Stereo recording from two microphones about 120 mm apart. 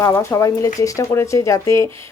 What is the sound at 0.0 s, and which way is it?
Speech, 25° left (ahead or behind).